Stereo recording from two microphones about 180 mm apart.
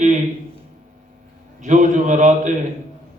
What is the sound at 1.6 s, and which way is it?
Speech, 45° right (ahead or behind).